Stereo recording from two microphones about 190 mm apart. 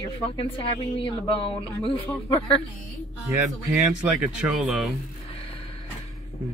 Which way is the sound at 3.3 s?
5° right (ahead or behind).